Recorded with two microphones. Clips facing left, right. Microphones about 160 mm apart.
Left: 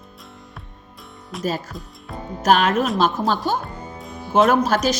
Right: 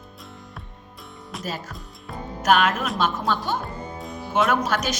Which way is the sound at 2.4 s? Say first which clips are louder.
Left 3 dB; 35° left (ahead or behind).